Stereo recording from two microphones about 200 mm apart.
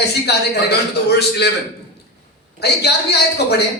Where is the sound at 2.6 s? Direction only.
55° left (ahead or behind).